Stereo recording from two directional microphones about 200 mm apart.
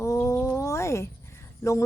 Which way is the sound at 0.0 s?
15° left (ahead or behind).